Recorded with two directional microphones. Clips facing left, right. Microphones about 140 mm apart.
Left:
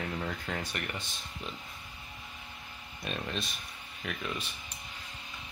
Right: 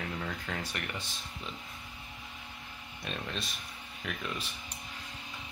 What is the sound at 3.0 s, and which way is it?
Speech, 5° left (ahead or behind).